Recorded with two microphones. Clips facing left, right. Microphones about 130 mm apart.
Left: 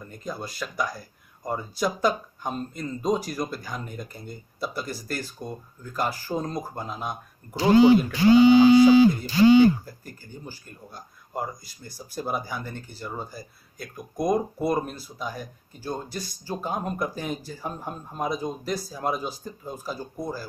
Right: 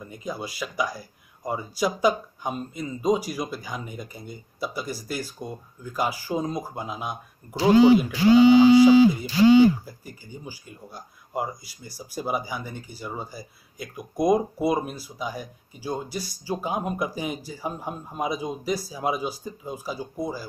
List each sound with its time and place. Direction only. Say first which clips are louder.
0.0 s speech: right 2 dB; 5° right (ahead or behind)